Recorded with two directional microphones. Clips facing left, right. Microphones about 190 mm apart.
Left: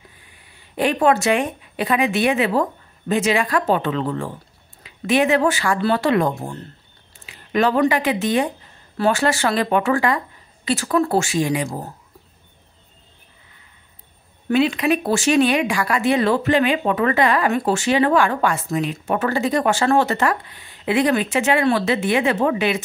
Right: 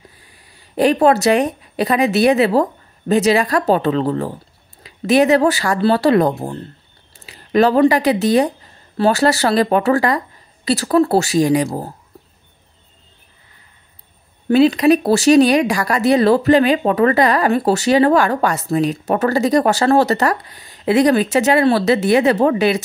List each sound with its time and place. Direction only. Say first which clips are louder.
0.2 s speech: right 2 dB; 35° right (ahead or behind)
14.5 s speech: right 6 dB; 40° right (ahead or behind)